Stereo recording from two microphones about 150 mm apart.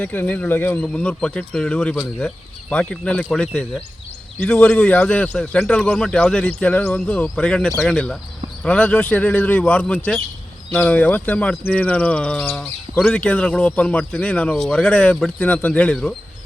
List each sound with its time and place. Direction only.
0.0 s speech: 10° left (ahead or behind)